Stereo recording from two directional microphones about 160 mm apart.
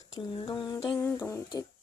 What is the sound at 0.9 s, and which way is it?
Speech, 15° left (ahead or behind).